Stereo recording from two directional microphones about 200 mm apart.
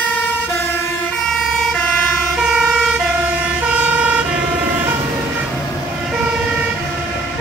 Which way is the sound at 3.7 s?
5° right (ahead or behind).